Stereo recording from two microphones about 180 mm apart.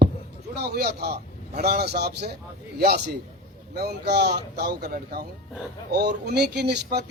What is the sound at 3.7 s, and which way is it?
A man's voice, 65° right (ahead or behind).